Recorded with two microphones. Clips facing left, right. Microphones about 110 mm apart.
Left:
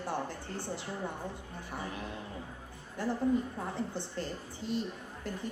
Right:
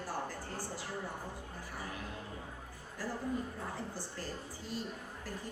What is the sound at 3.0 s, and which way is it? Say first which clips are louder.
Speech: left 7 dB; 25° left (ahead or behind).